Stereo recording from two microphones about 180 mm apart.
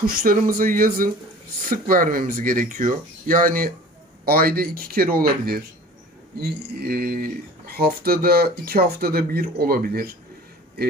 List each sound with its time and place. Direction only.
0.0 s speech: 55° right (ahead or behind)